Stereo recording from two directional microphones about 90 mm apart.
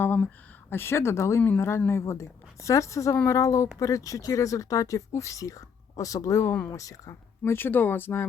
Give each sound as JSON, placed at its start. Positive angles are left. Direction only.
{"t": 0.7, "sound": "speech", "side_deg": 25}
{"t": 7.5, "sound": "speech", "side_deg": 25}